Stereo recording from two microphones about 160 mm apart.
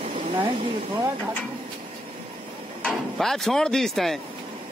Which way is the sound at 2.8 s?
Centre (ahead or behind).